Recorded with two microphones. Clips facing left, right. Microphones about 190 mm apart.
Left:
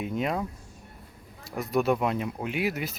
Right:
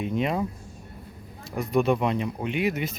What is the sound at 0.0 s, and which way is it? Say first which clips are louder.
Speech: right 3 dB; centre (ahead or behind).